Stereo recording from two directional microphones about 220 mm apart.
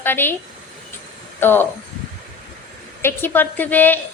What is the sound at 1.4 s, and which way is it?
Speech, 10° left (ahead or behind).